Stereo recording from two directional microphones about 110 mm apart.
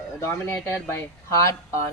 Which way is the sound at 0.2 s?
25° left (ahead or behind).